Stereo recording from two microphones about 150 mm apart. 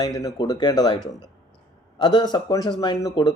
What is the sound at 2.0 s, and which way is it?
Speech, 30° left (ahead or behind).